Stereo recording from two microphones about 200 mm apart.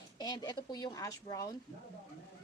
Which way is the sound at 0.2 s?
20° left (ahead or behind).